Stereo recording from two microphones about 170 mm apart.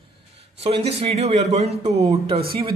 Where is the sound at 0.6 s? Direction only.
35° right (ahead or behind).